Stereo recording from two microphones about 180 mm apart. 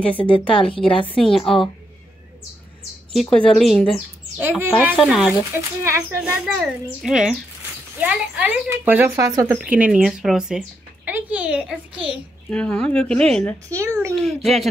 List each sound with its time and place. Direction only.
0.2 s a woman's voice: 30° left (ahead or behind)
0.7 s speech: 5° left (ahead or behind)
3.1 s speech: centre (ahead or behind)
4.4 s speech: 10° right (ahead or behind)
9.6 s speech: 5° right (ahead or behind)
12.4 s speech: 5° left (ahead or behind)
13.7 s speech: 15° right (ahead or behind)
14.2 s speech: centre (ahead or behind)